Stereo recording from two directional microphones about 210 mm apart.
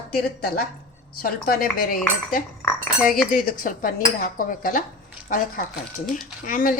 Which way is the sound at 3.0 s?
40° left (ahead or behind).